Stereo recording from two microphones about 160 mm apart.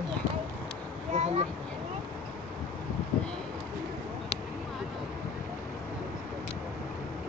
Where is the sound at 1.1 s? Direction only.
45° right (ahead or behind).